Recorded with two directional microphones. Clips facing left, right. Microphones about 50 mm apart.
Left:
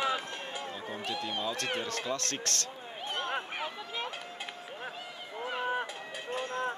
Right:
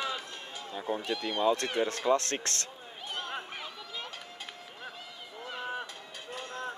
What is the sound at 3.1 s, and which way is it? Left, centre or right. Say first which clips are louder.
Run: left 3 dB; left.